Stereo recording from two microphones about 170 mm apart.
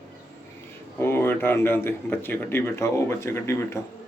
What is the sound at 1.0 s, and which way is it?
A man's voice, 15° left (ahead or behind).